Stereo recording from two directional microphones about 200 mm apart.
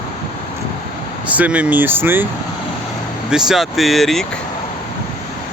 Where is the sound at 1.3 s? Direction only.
5° right (ahead or behind).